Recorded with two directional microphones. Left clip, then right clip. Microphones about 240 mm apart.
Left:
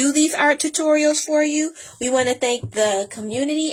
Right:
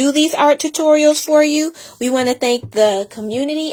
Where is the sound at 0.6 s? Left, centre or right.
Right.